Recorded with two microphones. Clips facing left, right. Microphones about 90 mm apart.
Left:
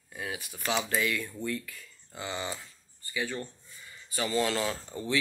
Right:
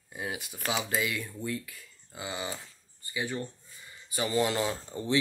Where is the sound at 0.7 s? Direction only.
10° right (ahead or behind).